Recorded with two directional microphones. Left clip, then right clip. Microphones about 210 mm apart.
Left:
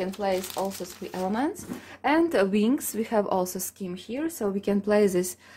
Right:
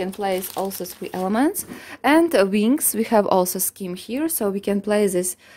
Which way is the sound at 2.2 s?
35° right (ahead or behind).